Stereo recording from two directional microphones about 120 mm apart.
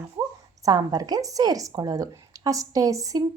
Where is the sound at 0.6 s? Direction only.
30° right (ahead or behind).